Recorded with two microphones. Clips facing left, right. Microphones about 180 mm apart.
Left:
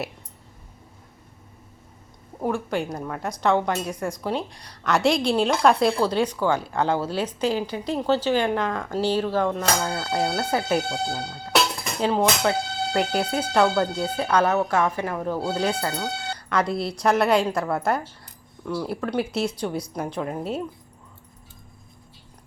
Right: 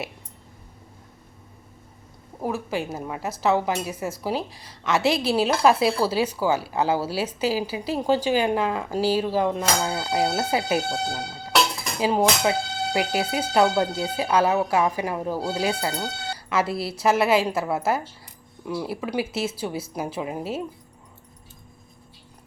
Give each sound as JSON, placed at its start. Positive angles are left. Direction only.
{"t": 2.4, "sound": "a woman's voice", "side_deg": -5}